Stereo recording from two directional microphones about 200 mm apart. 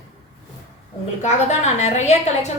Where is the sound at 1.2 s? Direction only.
35° left (ahead or behind).